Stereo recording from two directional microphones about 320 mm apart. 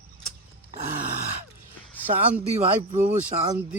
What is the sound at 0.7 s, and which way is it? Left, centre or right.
Grunt, right.